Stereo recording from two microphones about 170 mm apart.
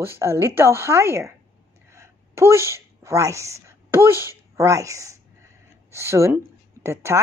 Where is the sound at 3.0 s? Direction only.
15° right (ahead or behind).